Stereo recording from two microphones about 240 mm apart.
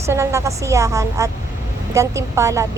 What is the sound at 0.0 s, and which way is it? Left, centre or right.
A woman's voice, centre.